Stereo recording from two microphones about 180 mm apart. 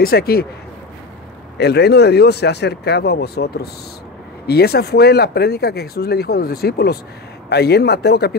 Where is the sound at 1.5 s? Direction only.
65° left (ahead or behind).